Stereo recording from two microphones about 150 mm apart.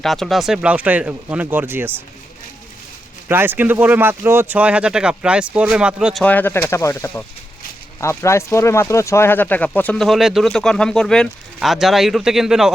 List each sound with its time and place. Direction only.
0.0 s speech: centre (ahead or behind); by 1.9 s 15° right (ahead or behind)
3.2 s speech: 15° right (ahead or behind)
6.2 s speech: 10° left (ahead or behind); by 12.7 s 5° right (ahead or behind)